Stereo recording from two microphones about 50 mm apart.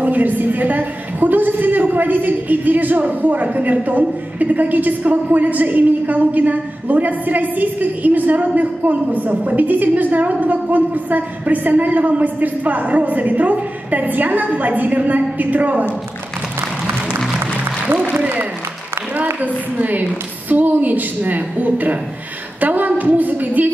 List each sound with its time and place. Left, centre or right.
0.0 s a woman's voice: right
19.4 s a woman's voice: right